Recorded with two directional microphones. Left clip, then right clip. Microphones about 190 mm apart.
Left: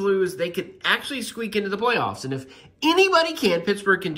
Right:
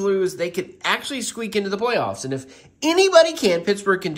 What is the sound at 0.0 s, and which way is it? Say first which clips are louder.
Speech: right 1 dB; centre (ahead or behind).